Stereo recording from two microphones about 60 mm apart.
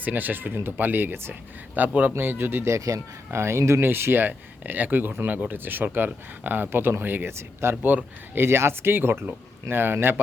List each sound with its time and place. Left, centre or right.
0.0 s speech: right
2.6 s speech: right
3.3 s speech: right
7.3 s speech: right
7.8 s a man's voice: right
8.4 s speech: right